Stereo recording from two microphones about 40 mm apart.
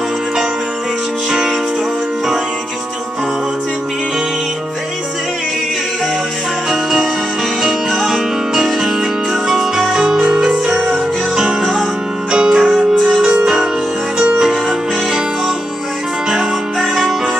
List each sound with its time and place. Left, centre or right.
6.7 s music: centre
10.7 s music: centre
13.0 s music: centre
14.2 s music: right
16.8 s music: centre